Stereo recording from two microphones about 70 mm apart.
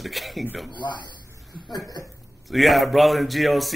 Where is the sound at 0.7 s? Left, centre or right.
Left.